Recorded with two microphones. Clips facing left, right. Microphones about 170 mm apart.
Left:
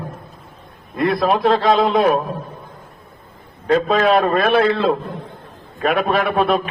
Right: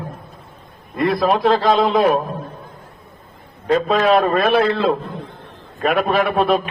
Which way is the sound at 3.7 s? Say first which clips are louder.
Even; centre (ahead or behind).